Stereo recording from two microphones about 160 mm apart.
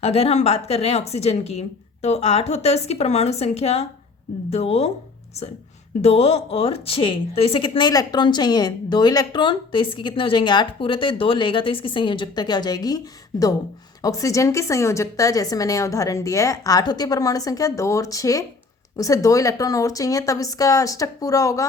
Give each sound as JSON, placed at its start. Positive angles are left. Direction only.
{"t": 0.0, "sound": "speech", "side_deg": 40}
{"t": 6.0, "sound": "speech", "side_deg": 40}
{"t": 14.0, "sound": "a woman's voice", "side_deg": 20}